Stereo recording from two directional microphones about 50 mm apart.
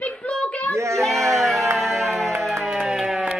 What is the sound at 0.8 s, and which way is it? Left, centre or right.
Speech, right.